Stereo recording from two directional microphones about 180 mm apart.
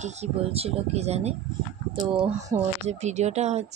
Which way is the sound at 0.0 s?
35° right (ahead or behind).